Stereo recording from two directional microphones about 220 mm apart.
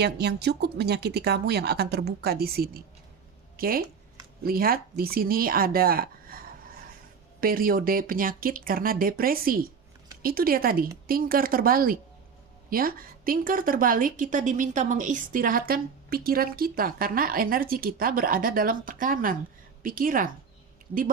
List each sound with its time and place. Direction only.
0.0 s a woman's voice: 50° right (ahead or behind)
7.4 s a woman's voice: 40° right (ahead or behind)